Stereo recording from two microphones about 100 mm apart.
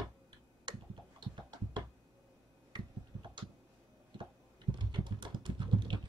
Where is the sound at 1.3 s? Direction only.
50° right (ahead or behind).